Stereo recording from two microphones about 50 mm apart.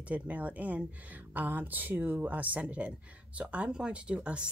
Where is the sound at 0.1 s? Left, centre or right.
Right.